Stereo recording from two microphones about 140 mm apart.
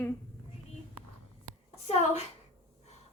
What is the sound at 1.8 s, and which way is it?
Speech, 50° left (ahead or behind).